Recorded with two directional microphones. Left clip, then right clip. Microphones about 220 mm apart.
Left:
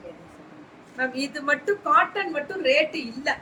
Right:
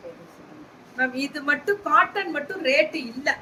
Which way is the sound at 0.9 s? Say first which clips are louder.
Right 2 dB; 10° right (ahead or behind).